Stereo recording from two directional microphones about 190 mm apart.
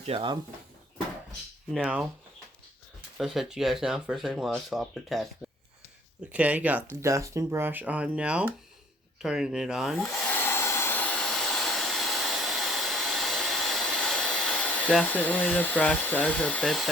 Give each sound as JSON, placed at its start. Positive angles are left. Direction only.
{"t": 0.0, "sound": "speech", "side_deg": -30}
{"t": 1.7, "sound": "speech", "side_deg": -5}
{"t": 3.2, "sound": "speech", "side_deg": 0}
{"t": 6.3, "sound": "speech", "side_deg": -5}
{"t": 9.2, "sound": "hair dryer", "side_deg": -5}